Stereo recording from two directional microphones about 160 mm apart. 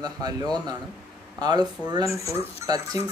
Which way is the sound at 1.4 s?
25° right (ahead or behind).